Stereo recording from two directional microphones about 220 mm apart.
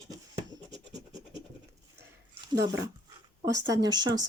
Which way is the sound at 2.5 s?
15° right (ahead or behind).